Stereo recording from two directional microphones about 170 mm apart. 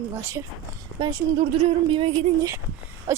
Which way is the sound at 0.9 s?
25° right (ahead or behind).